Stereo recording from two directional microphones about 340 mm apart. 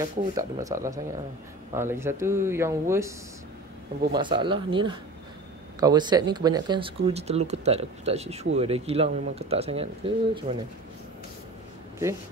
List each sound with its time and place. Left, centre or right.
0.0 s speech: centre
4.1 s speech: centre